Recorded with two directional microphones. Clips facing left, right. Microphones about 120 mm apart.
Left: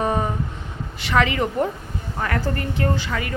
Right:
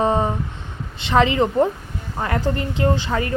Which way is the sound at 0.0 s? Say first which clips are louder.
Right 4 dB; 25° right (ahead or behind).